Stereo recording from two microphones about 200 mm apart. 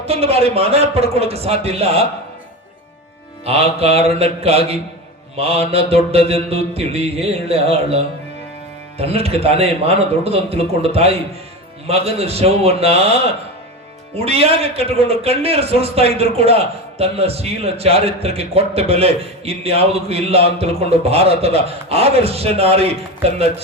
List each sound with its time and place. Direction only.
0.0 s mantra: 30° right (ahead or behind)
3.4 s mantra: 30° right (ahead or behind)
14.3 s a man's voice: 30° right (ahead or behind)
21.8 s mantra: 30° right (ahead or behind)